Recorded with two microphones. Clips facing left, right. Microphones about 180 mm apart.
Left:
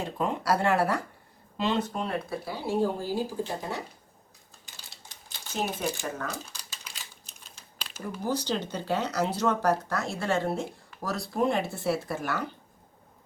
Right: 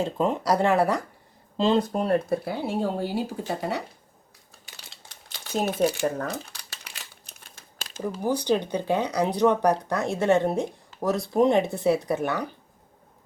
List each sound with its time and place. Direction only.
0.0 s speech: 25° right (ahead or behind)
1.5 s speech: 30° right (ahead or behind)
2.4 s speech: 60° right (ahead or behind)
5.4 s speech: 65° right (ahead or behind)
6.4 s a sound: 60° right (ahead or behind)
8.2 s speech: 15° right (ahead or behind)